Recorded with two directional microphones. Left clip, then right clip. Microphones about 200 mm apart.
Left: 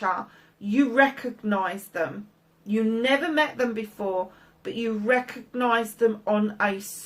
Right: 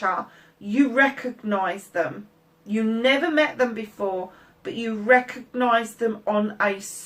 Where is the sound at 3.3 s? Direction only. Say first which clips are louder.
Right 3 dB; 45° left (ahead or behind).